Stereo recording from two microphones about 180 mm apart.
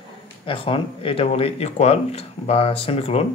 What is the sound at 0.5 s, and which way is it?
Speech, 30° left (ahead or behind).